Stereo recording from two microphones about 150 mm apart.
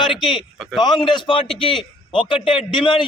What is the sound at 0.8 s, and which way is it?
A man's voice, 30° left (ahead or behind).